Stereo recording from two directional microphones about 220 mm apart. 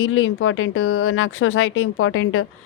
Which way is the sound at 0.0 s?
65° left (ahead or behind).